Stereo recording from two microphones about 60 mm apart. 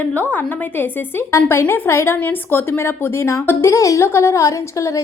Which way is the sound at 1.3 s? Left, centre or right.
Left.